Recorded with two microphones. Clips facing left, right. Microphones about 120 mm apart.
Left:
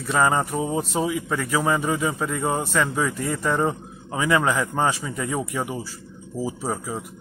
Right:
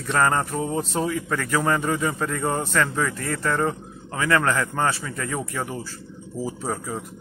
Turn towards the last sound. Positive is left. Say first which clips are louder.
# left 1 dB
turn(degrees=10)  # may be behind; listen again after turning